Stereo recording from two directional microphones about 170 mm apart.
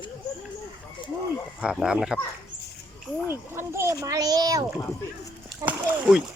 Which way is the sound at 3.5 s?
15° right (ahead or behind).